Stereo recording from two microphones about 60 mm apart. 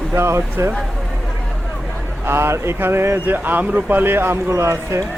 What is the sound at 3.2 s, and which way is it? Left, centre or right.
A man's voice, right.